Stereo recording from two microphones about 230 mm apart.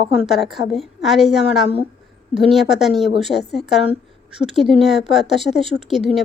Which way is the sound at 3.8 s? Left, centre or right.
Right.